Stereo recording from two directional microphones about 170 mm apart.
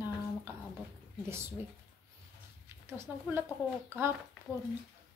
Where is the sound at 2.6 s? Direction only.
15° right (ahead or behind).